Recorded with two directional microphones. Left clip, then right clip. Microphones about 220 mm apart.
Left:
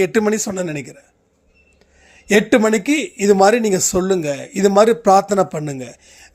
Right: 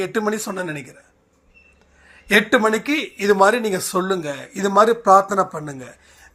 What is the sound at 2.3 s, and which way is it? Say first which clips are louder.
A man's voice: left 2 dB; 55° left (ahead or behind).